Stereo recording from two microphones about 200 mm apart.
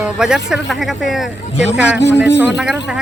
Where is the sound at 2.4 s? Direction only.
5° right (ahead or behind).